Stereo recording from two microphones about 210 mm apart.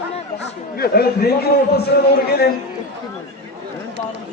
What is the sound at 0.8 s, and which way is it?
A man's voice, 50° left (ahead or behind).